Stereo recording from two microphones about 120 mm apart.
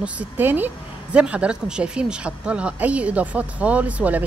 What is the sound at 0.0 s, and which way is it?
Speech, 15° right (ahead or behind).